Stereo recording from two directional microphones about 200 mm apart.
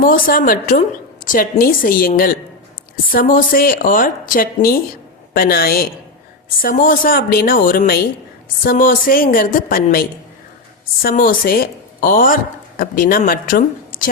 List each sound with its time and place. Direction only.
0.0 s a woman's voice: 45° left (ahead or behind)